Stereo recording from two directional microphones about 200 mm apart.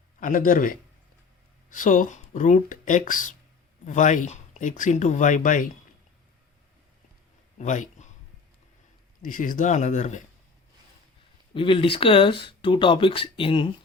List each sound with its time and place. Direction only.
0.2 s a man's voice: 40° left (ahead or behind)
7.6 s speech: 35° left (ahead or behind)
9.2 s speech: 45° left (ahead or behind)
11.5 s speech: 25° left (ahead or behind)